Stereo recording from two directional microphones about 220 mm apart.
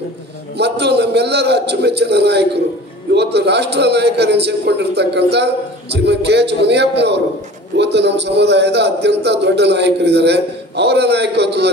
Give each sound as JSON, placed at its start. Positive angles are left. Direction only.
{"t": 0.6, "sound": "a man's voice", "side_deg": -50}